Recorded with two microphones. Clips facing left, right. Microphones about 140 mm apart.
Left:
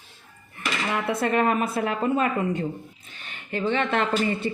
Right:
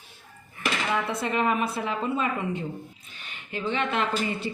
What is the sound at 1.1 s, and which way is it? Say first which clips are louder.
A woman's voice: left 7 dB; 50° left (ahead or behind).